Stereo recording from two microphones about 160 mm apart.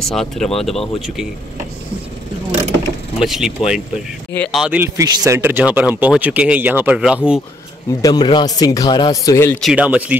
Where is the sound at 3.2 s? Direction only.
5° right (ahead or behind).